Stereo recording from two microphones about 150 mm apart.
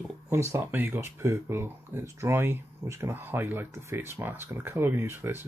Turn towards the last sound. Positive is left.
turn(degrees=-15)  # may be behind; listen again after turning